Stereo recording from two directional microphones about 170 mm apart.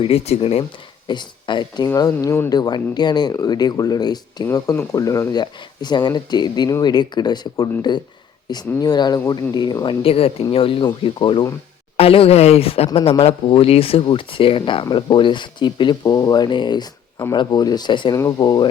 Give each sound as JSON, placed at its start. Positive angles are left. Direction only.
{"t": 0.0, "sound": "speech", "side_deg": 35}